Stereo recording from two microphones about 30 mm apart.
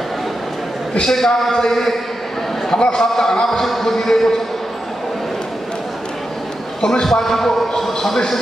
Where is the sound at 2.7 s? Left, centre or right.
Left.